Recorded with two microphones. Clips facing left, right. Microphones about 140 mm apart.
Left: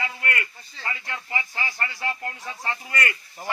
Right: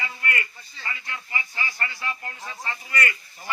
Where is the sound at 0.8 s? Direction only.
55° left (ahead or behind).